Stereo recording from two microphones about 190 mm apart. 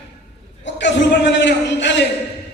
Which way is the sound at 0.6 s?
70° left (ahead or behind).